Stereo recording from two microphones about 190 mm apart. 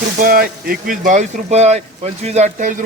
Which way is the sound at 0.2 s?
50° right (ahead or behind).